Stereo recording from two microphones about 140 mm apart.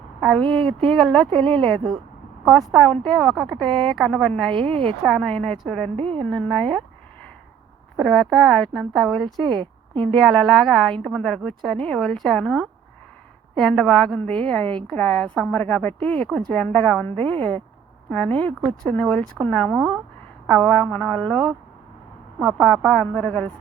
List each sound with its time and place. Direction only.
0.4 s speech: 40° right (ahead or behind)
0.9 s a woman's voice: centre (ahead or behind)
4.5 s a woman's voice: 45° right (ahead or behind)
5.0 s a woman's voice: 5° left (ahead or behind)
6.0 s speech: 40° right (ahead or behind)
6.3 s a woman's voice: 5° left (ahead or behind)
7.9 s a woman's voice: centre (ahead or behind)
9.5 s a woman's voice: 35° right (ahead or behind)
10.2 s a woman's voice: centre (ahead or behind)
18.1 s a woman's voice: 10° left (ahead or behind)